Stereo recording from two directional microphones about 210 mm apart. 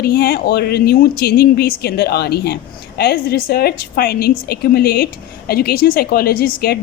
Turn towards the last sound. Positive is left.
turn(degrees=45)  # may be behind; listen again after turning